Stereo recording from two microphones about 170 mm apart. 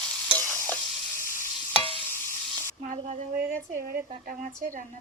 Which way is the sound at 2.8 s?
50° right (ahead or behind).